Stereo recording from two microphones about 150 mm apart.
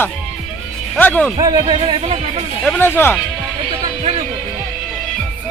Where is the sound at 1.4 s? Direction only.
30° right (ahead or behind).